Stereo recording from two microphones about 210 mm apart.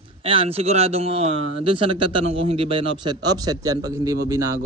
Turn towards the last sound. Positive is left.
turn(degrees=-15)  # may be behind; listen again after turning